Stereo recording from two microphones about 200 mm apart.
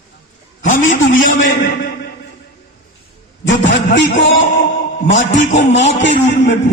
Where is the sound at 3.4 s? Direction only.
65° left (ahead or behind).